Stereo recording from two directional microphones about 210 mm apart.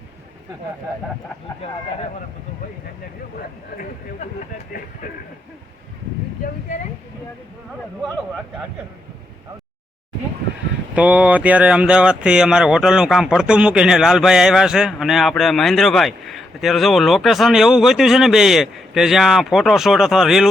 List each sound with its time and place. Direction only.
4.2 s speech: 35° left (ahead or behind)
10.9 s speech: 5° right (ahead or behind)